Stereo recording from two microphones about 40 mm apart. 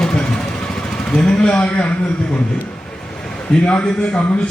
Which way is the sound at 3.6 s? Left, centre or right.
Left.